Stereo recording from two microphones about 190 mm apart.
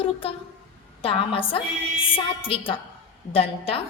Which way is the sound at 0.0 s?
30° left (ahead or behind).